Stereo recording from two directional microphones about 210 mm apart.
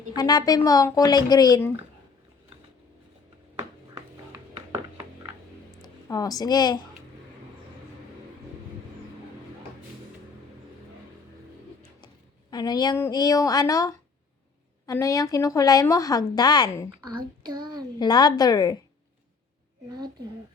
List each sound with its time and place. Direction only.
0.2 s a woman's voice: 20° left (ahead or behind)
3.5 s music: 15° right (ahead or behind)
5.8 s speech: 15° left (ahead or behind)
12.5 s a woman's voice: 20° left (ahead or behind)
17.0 s a child's voice: 20° right (ahead or behind)
18.0 s a woman's voice: 20° left (ahead or behind)